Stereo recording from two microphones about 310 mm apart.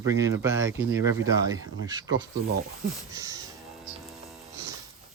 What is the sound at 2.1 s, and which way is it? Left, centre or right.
Speech, right.